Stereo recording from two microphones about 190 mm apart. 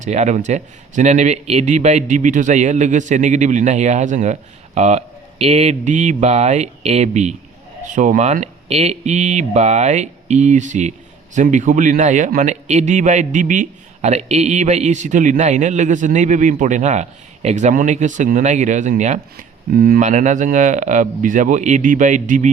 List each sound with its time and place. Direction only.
0.0 s a man's voice: 40° right (ahead or behind)
19.7 s a man's voice: 50° right (ahead or behind)